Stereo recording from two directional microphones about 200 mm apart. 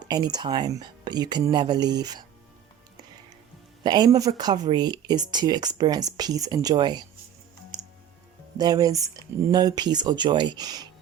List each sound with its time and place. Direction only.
0.0 s speech: 20° right (ahead or behind)
3.8 s speech: 20° right (ahead or behind)
8.5 s speech: 20° right (ahead or behind)